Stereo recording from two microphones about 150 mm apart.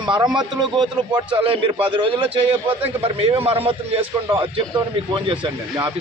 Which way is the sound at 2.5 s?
15° right (ahead or behind).